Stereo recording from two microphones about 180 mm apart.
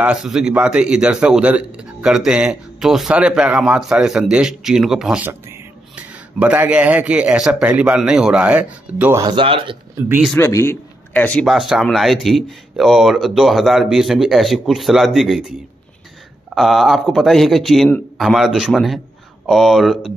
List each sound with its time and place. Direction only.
0.0 s a man's voice: 5° right (ahead or behind)
9.2 s speech: 30° right (ahead or behind)
10.0 s a man's voice: 10° right (ahead or behind)
10.3 s a man's voice: 15° left (ahead or behind); by 15.5 s centre (ahead or behind)
16.5 s a man's voice: centre (ahead or behind)